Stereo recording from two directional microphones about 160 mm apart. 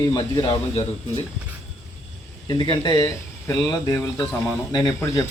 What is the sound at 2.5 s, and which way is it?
Speech, 30° left (ahead or behind).